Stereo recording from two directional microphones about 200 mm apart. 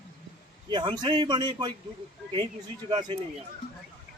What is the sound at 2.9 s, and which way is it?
Speech, 20° right (ahead or behind).